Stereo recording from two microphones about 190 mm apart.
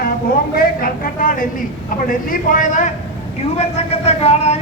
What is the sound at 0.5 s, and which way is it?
A man's voice, 50° left (ahead or behind).